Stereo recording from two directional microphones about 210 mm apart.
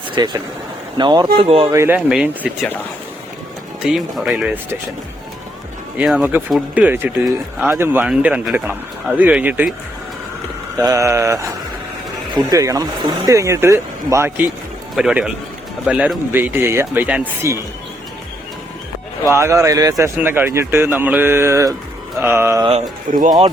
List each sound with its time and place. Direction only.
0.2 s speech: 20° right (ahead or behind)
1.7 s speech: 10° right (ahead or behind)
3.8 s speech: centre (ahead or behind)
6.0 s speech: 5° right (ahead or behind)
10.8 s speech: 15° right (ahead or behind)
19.3 s speech: 15° right (ahead or behind)
22.7 s speech: 35° right (ahead or behind)